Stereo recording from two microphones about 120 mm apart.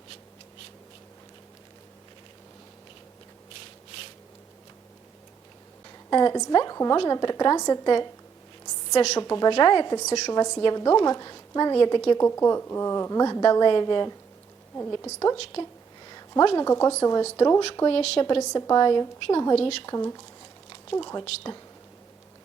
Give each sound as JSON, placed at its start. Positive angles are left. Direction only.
{"t": 6.1, "sound": "speech", "side_deg": 35}
{"t": 9.1, "sound": "speech", "side_deg": 35}
{"t": 12.2, "sound": "a woman's voice", "side_deg": 25}
{"t": 16.0, "sound": "a sound", "side_deg": 35}
{"t": 16.6, "sound": "a woman's voice", "side_deg": 25}
{"t": 17.8, "sound": "speech", "side_deg": 55}
{"t": 18.2, "sound": "a woman's voice", "side_deg": 45}
{"t": 19.5, "sound": "speech", "side_deg": 60}
{"t": 19.8, "sound": "a woman's voice", "side_deg": 30}
{"t": 21.1, "sound": "speech", "side_deg": 35}